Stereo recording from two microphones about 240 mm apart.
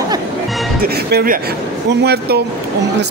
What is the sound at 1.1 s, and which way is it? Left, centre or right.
Speech, right.